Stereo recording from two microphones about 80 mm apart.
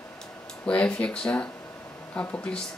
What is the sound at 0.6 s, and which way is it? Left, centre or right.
Speech, centre.